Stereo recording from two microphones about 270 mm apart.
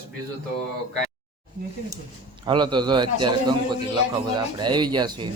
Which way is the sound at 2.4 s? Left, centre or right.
Centre.